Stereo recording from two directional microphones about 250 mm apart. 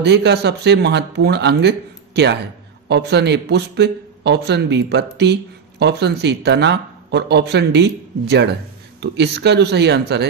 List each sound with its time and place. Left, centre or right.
0.0 s a man's voice: right